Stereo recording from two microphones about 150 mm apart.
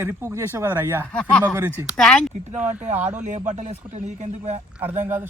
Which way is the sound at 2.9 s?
50° right (ahead or behind).